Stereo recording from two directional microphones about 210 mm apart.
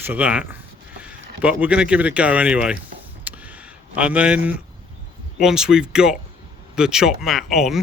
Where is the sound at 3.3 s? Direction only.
10° right (ahead or behind).